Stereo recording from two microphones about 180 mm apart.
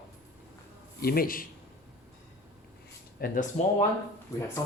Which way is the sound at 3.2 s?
55° left (ahead or behind).